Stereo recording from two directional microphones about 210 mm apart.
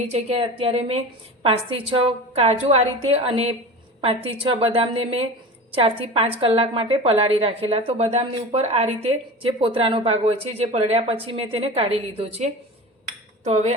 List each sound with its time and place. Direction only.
0.0 s a woman's voice: 30° right (ahead or behind)